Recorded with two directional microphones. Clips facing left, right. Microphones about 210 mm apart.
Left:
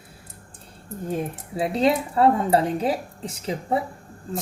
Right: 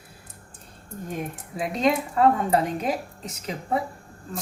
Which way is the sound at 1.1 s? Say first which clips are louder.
Left 5 dB; 30° left (ahead or behind).